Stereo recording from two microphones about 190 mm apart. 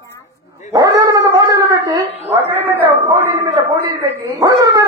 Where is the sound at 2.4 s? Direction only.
10° right (ahead or behind).